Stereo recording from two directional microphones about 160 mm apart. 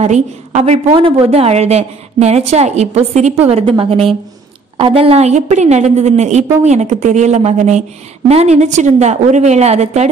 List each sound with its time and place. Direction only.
0.0 s a woman's voice: 45° right (ahead or behind)